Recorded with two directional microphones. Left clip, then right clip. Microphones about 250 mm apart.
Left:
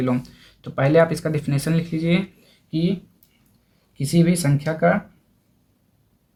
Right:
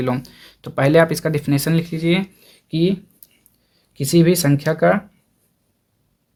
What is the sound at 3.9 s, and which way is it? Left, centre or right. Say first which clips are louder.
Speech: right 6 dB; right.